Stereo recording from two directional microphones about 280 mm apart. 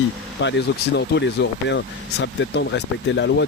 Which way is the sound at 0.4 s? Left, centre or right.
Left.